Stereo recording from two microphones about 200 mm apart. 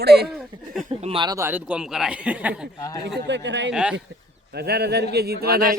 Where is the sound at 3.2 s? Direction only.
60° right (ahead or behind).